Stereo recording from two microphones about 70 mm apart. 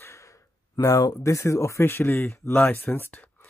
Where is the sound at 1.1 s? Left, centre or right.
Left.